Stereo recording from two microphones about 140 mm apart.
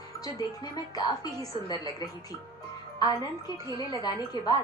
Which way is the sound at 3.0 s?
30° left (ahead or behind).